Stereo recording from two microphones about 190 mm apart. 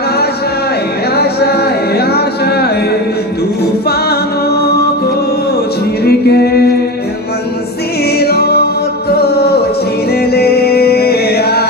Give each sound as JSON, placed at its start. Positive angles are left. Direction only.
{"t": 1.1, "sound": "music", "side_deg": 55}
{"t": 6.1, "sound": "music", "side_deg": 55}
{"t": 8.2, "sound": "music", "side_deg": 55}